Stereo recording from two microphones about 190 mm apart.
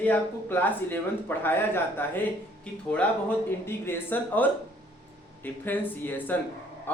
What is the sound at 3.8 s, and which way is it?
Speech, 10° left (ahead or behind).